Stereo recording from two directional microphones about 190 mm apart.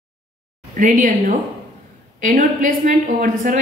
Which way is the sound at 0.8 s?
45° right (ahead or behind).